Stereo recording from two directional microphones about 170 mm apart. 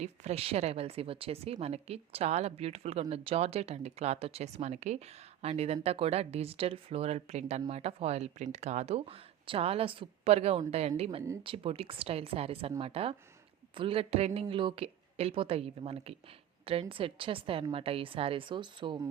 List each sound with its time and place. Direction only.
0.0 s speech: 40° right (ahead or behind)